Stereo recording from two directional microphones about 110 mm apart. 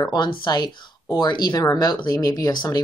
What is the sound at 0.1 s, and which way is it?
Speech, 45° left (ahead or behind).